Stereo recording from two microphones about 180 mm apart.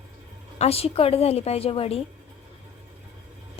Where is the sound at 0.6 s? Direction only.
35° left (ahead or behind).